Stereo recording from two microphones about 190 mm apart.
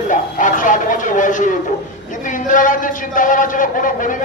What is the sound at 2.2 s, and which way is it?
A man's voice, 40° left (ahead or behind).